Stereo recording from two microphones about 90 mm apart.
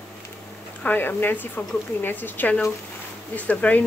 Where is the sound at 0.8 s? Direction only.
20° left (ahead or behind).